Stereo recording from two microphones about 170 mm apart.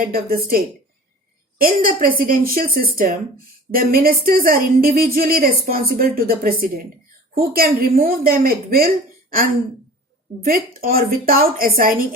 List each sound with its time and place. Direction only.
0.0 s speech: 60° right (ahead or behind)
10.4 s speech: 60° right (ahead or behind)